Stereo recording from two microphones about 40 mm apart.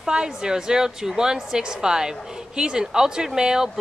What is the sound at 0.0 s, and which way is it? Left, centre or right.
Speech, centre.